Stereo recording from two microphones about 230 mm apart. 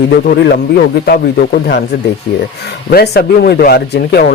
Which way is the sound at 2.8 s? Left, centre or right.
Left.